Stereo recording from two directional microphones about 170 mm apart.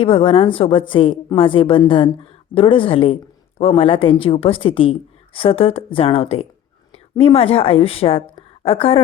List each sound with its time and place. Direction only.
0.0 s a woman's voice: 35° left (ahead or behind)